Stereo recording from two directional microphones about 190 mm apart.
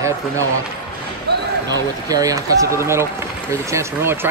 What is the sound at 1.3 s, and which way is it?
Basketball bounce, 60° right (ahead or behind).